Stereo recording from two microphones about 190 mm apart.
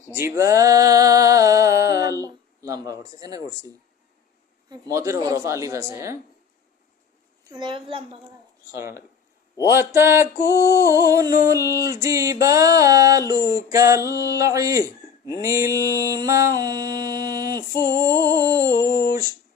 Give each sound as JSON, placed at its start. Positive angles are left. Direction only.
{"t": 0.1, "sound": "music", "side_deg": -15}
{"t": 4.7, "sound": "speech", "side_deg": -15}
{"t": 7.4, "sound": "a child's voice", "side_deg": -25}
{"t": 9.7, "sound": "speech", "side_deg": -15}
{"t": 10.4, "sound": "music", "side_deg": 15}
{"t": 10.7, "sound": "speech", "side_deg": -15}